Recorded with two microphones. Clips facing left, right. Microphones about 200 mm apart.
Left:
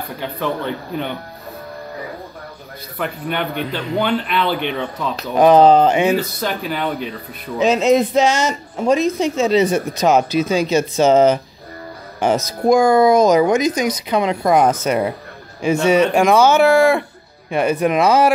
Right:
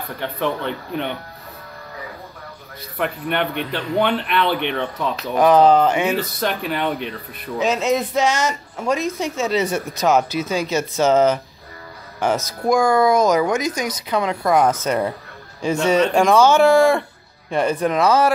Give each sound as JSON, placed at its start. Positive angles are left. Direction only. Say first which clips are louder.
{"t": 0.2, "sound": "speech", "louder": "even", "side_deg": 5}
{"t": 3.0, "sound": "speech", "louder": "right 1 dB", "side_deg": 0}
{"t": 5.4, "sound": "speech", "louder": "left 3 dB", "side_deg": 25}
{"t": 6.1, "sound": "speech", "louder": "left 2 dB", "side_deg": 0}
{"t": 7.5, "sound": "speech", "louder": "left 5 dB", "side_deg": 20}